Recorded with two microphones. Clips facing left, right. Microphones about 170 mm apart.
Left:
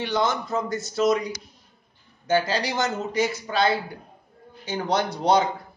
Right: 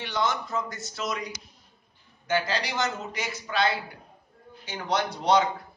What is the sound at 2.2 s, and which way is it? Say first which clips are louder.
A man's voice: left 5 dB; 35° left (ahead or behind).